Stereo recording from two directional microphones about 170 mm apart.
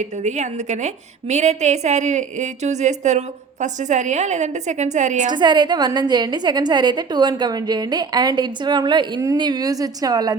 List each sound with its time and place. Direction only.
0.0 s a woman's voice: 45° right (ahead or behind)
5.3 s a woman's voice: 25° right (ahead or behind)